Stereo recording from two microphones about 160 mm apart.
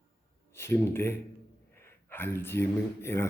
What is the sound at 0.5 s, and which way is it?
Speech, 15° left (ahead or behind).